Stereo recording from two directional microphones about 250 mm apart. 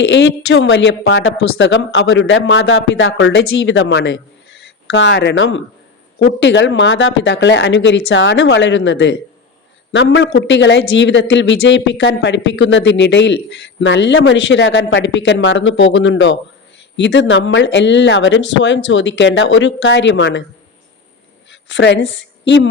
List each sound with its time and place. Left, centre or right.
0.0 s a man's voice: left
21.5 s a woman's voice: left